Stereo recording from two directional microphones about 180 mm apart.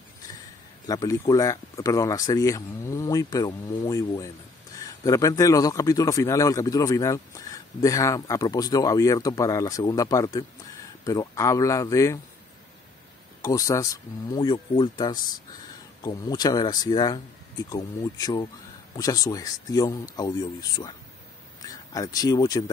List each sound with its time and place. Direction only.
0.8 s a man's voice: 20° left (ahead or behind)
13.4 s a man's voice: 20° left (ahead or behind)